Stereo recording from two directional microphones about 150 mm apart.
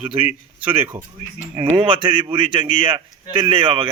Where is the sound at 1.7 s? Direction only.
35° right (ahead or behind).